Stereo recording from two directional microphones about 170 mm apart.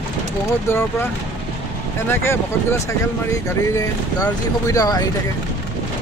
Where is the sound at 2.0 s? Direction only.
15° left (ahead or behind).